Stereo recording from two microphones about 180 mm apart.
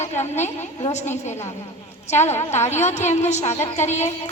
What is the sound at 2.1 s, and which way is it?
Speech, 15° left (ahead or behind).